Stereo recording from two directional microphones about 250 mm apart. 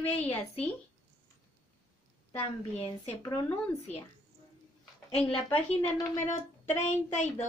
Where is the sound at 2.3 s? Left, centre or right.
Left.